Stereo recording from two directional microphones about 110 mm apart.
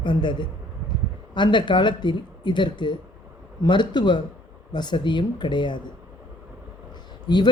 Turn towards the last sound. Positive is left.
turn(degrees=40)  # may be behind; listen again after turning